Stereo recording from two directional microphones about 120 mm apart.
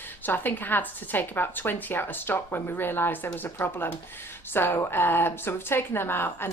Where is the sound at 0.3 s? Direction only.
15° left (ahead or behind).